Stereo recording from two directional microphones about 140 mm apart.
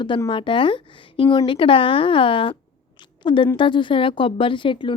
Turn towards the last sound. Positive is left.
turn(degrees=35)  # may be behind; listen again after turning